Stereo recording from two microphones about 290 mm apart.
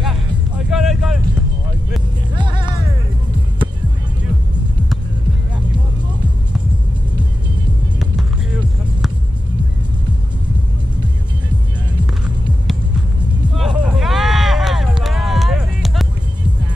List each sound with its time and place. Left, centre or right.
0.7 s vehicle: centre
2.3 s music: centre
13.6 s a sound: centre